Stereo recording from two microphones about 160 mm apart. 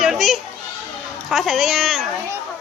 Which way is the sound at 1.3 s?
Centre (ahead or behind).